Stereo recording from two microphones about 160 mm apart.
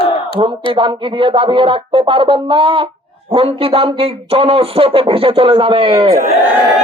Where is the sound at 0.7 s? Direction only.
35° right (ahead or behind).